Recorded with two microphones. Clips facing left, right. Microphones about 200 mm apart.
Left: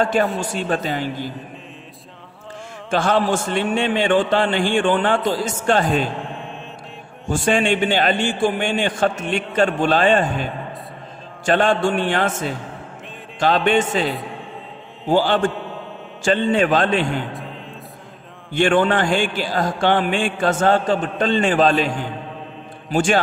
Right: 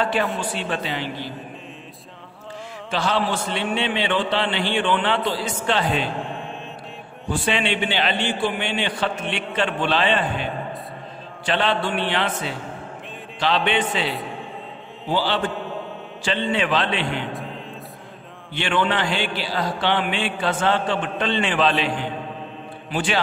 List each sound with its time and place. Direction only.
0.0 s speech: 45° left (ahead or behind)
2.9 s speech: 50° left (ahead or behind)
7.2 s speech: 45° left (ahead or behind)
18.5 s speech: 45° left (ahead or behind)